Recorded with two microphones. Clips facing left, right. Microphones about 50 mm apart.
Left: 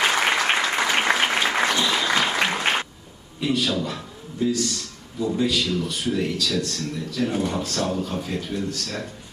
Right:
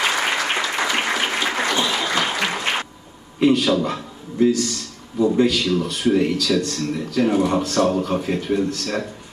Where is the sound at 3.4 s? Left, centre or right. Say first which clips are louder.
Right 7 dB; right.